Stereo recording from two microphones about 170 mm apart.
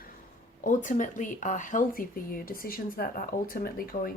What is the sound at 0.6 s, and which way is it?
Speech, 50° left (ahead or behind).